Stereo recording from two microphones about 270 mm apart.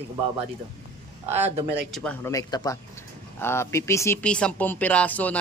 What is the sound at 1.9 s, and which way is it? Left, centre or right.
Speech, centre.